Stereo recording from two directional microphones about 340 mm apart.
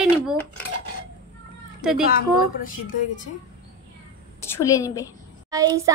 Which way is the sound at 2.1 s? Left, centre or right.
Left.